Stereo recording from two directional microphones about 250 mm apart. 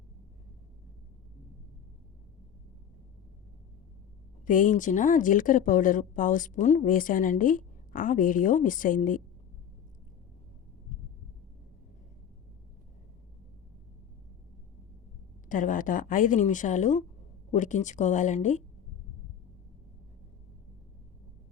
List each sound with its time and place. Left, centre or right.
4.4 s speech: left
15.4 s a woman's voice: left